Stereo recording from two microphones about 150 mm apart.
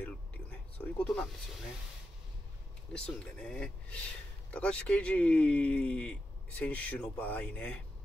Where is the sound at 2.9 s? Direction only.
5° left (ahead or behind).